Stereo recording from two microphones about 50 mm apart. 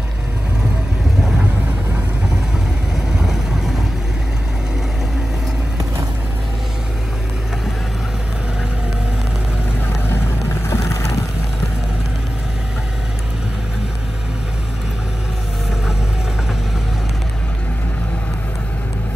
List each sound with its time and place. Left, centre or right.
3.2 s vehicle: centre
10.7 s boat: left